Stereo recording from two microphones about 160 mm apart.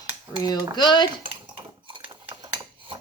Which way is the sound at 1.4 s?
30° right (ahead or behind).